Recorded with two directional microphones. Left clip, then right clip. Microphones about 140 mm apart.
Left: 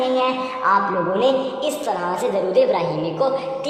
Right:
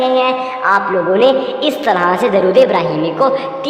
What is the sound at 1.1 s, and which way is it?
A woman's voice, 40° right (ahead or behind).